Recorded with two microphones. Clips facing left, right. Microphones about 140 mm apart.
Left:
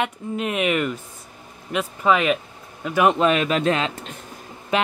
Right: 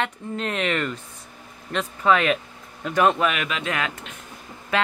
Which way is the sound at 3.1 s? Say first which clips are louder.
Left 6 dB; 30° left (ahead or behind).